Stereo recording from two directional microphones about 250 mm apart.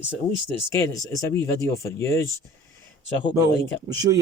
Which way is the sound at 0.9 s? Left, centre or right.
Centre.